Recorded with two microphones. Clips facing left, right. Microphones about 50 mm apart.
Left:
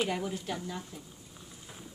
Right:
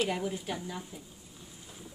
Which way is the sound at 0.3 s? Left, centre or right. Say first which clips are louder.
Even; centre.